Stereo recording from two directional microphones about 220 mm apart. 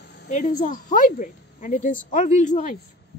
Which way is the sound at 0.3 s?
35° left (ahead or behind).